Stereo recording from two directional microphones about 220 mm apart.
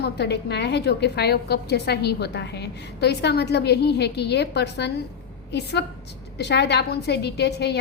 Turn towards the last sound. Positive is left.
turn(degrees=50)  # may be behind; listen again after turning